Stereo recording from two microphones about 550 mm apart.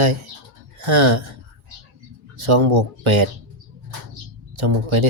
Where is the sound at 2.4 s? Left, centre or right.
Right.